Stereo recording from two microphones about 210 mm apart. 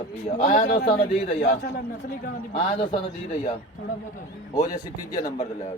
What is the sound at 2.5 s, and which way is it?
Speech, 25° left (ahead or behind).